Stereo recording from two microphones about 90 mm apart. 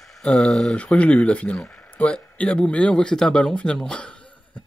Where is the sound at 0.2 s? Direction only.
5° left (ahead or behind).